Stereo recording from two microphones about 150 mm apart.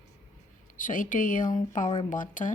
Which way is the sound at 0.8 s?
60° left (ahead or behind).